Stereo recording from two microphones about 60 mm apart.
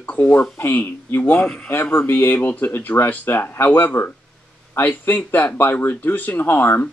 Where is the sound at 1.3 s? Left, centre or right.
Centre.